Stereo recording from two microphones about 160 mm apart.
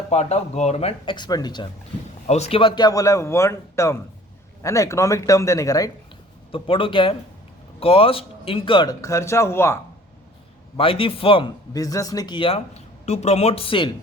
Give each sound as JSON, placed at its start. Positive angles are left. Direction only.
{"t": 0.1, "sound": "speech", "side_deg": 45}
{"t": 2.2, "sound": "a man's voice", "side_deg": 45}
{"t": 6.5, "sound": "a man's voice", "side_deg": 35}
{"t": 10.8, "sound": "speech", "side_deg": 35}